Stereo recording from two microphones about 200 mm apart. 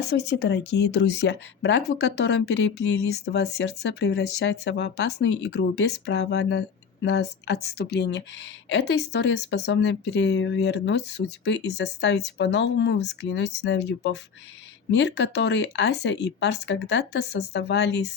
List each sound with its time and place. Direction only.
0.0 s speech: 55° left (ahead or behind)